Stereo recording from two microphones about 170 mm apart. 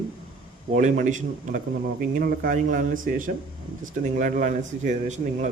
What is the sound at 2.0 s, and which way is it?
A man's voice, 60° right (ahead or behind).